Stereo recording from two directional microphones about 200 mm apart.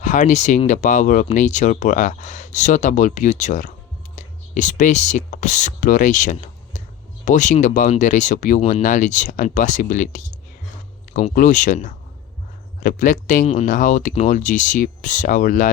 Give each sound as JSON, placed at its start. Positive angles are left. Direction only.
{"t": 0.0, "sound": "speech", "side_deg": 35}